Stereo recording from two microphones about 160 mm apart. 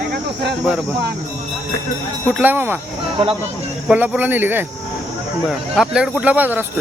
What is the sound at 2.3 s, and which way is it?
Speech, 10° right (ahead or behind).